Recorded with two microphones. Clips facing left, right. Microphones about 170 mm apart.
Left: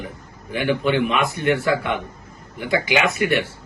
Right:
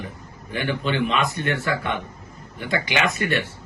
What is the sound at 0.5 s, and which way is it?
Speech, 15° left (ahead or behind).